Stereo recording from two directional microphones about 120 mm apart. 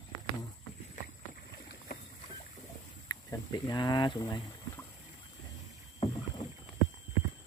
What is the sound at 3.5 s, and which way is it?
Speech, 40° left (ahead or behind).